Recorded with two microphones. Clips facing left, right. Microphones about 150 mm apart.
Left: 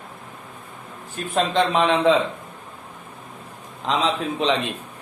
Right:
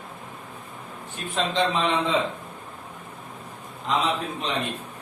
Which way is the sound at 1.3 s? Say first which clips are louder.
Left 4 dB; 65° left (ahead or behind).